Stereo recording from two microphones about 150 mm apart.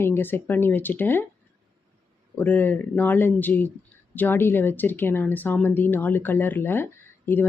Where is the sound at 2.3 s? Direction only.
10° left (ahead or behind).